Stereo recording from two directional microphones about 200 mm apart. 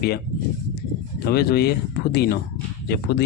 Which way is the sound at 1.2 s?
50° left (ahead or behind).